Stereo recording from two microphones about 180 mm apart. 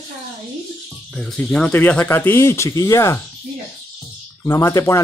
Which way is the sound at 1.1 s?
5° left (ahead or behind).